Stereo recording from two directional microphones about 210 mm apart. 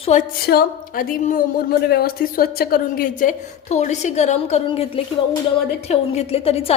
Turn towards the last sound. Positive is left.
turn(degrees=30)  # may be behind; listen again after turning